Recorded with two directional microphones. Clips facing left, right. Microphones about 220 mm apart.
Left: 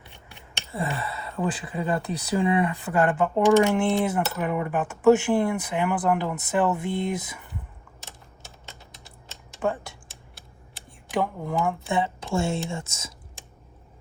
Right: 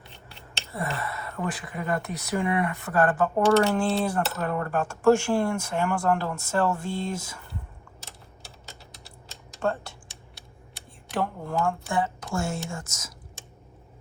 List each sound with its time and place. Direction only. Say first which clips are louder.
0.3 s scissors: even; 15° left (ahead or behind)
1.1 s speech: left 3 dB; 30° left (ahead or behind)
9.6 s speech: left 1 dB; 5° left (ahead or behind)
11.1 s speech: left 2 dB; 15° left (ahead or behind)